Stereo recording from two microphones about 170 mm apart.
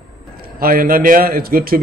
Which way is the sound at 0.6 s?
60° right (ahead or behind).